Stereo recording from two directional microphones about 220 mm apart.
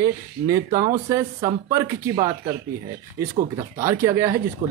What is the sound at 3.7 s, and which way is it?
Speech, 15° right (ahead or behind).